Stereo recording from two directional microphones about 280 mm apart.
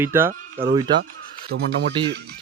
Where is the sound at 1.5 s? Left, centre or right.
Right.